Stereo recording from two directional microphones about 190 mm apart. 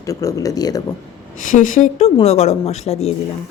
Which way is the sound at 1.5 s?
45° left (ahead or behind).